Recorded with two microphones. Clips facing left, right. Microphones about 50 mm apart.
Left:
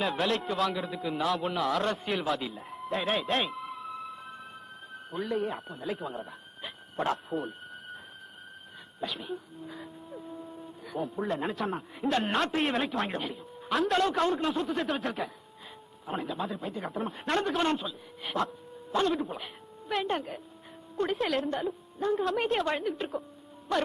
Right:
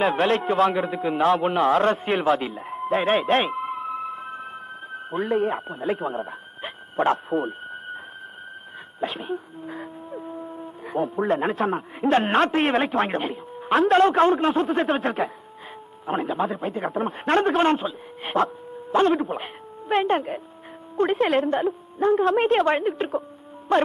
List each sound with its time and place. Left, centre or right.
0.0 s a man's voice: right
2.8 s music: right
9.0 s a man's voice: right
21.5 s speech: right